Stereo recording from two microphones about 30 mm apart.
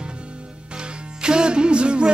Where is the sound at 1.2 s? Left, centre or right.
Right.